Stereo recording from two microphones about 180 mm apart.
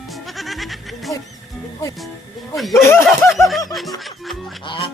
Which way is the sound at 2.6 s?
Centre (ahead or behind).